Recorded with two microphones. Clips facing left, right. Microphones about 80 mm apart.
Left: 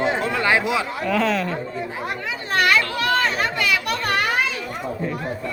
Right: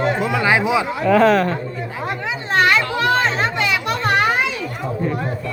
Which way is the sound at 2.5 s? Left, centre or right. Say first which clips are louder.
Right 3 dB; right.